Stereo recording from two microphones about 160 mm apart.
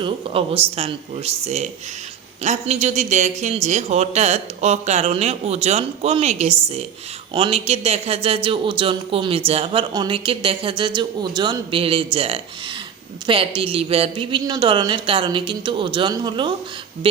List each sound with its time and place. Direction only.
0.0 s a man's voice: 35° right (ahead or behind)
9.9 s speech: 30° right (ahead or behind)